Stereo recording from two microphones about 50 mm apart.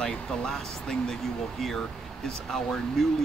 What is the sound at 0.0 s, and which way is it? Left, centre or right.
Speech, centre.